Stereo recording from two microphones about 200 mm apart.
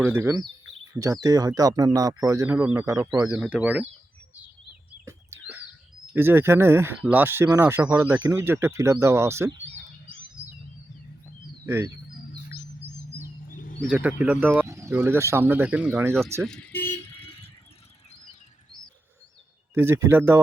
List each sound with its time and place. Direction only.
0.0 s speech: 10° right (ahead or behind)
3.3 s speech: 5° right (ahead or behind)
4.9 s a sound: 10° right (ahead or behind)
6.1 s speech: 10° right (ahead or behind)
11.6 s speech: 10° right (ahead or behind)
13.5 s a sound: 45° left (ahead or behind)
13.9 s speech: 5° right (ahead or behind)
16.4 s music: 5° left (ahead or behind)
17.1 s vehicle: 25° left (ahead or behind)
19.7 s speech: 10° right (ahead or behind)